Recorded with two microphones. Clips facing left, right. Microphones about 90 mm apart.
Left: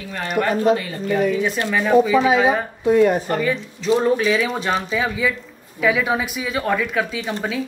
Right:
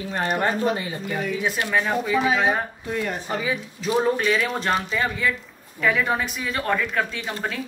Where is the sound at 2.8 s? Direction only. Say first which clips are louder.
Left 16 dB; 35° left (ahead or behind).